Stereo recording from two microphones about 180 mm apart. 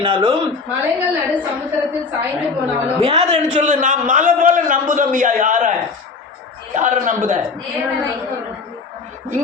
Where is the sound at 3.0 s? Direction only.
35° right (ahead or behind).